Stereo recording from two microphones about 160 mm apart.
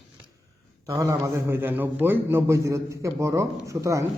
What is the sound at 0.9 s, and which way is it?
A man's voice, 20° right (ahead or behind).